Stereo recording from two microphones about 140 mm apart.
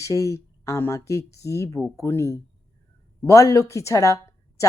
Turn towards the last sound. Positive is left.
turn(degrees=20)  # may be behind; listen again after turning